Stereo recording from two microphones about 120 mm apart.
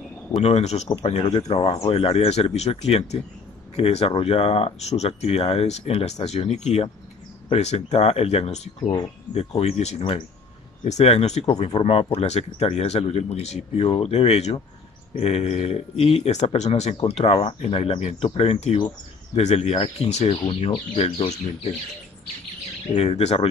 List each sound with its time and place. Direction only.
0.4 s speech: 60° left (ahead or behind)
0.8 s speech: 50° left (ahead or behind)
10.8 s speech: 70° left (ahead or behind)
16.9 s speech: 55° left (ahead or behind)
20.2 s speech: 45° left (ahead or behind)
22.9 s speech: 60° left (ahead or behind)